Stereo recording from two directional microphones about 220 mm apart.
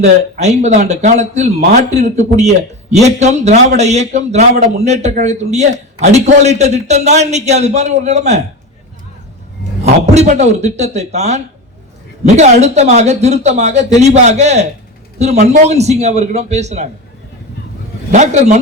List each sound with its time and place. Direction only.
0.2 s a man's voice: 30° right (ahead or behind)
9.8 s a man's voice: 30° right (ahead or behind)
18.1 s a man's voice: 30° right (ahead or behind)